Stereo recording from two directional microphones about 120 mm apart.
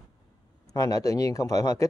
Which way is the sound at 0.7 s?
30° left (ahead or behind).